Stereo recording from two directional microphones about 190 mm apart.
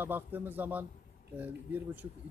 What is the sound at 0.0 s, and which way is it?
Speech, 10° right (ahead or behind).